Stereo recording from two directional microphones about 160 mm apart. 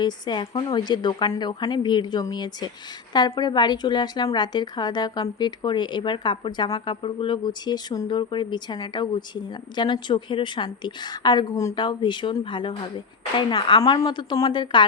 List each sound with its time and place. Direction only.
0.0 s a woman's voice: 30° left (ahead or behind)